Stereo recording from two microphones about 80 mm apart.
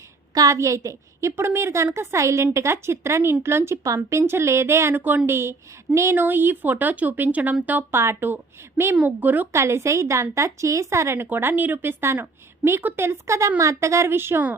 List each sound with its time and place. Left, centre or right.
0.3 s a woman's voice: right
9.5 s a woman's voice: right